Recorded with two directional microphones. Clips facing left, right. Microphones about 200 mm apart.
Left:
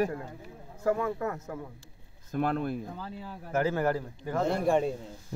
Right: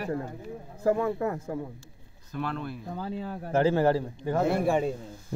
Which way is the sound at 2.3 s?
50° left (ahead or behind).